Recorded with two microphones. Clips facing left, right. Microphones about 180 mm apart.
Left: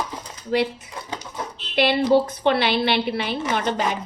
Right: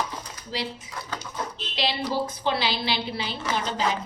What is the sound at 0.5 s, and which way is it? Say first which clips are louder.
Speech: left 11 dB; 55° left (ahead or behind).